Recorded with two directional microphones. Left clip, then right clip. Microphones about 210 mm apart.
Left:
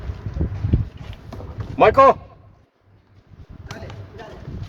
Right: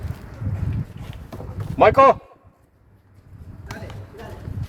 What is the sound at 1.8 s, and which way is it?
Speech, 10° left (ahead or behind).